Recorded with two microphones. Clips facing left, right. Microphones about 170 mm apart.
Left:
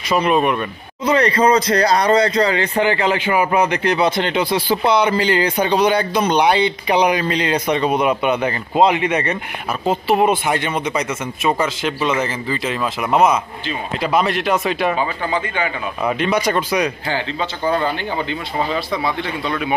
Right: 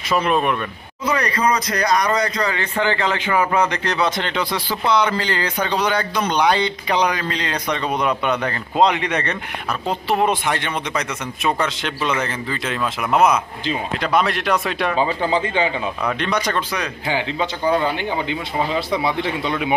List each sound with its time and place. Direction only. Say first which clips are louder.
0.1 s speech: left 3 dB; centre (ahead or behind)
1.0 s speech: left 5 dB; 25° left (ahead or behind); by 15.0 s centre (ahead or behind)
15.0 s speech: right 2 dB; 25° right (ahead or behind)
16.1 s speech: left 5 dB; 10° left (ahead or behind)
17.1 s speech: right 1 dB; 15° right (ahead or behind)